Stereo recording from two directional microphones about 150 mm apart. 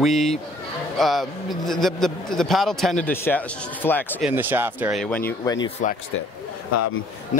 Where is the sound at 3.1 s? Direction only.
15° left (ahead or behind).